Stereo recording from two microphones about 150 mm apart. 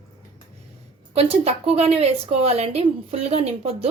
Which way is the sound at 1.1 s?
40° right (ahead or behind).